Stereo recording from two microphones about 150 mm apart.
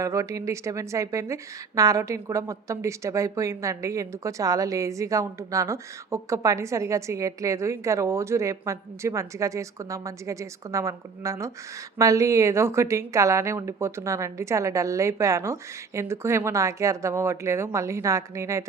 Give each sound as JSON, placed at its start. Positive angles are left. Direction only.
{"t": 0.0, "sound": "a woman's voice", "side_deg": -20}